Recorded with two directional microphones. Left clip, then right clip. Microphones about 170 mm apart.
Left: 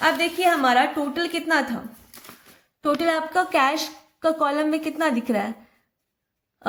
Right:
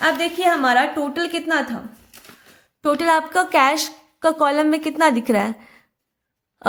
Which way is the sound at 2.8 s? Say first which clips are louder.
Right 5 dB; 25° right (ahead or behind).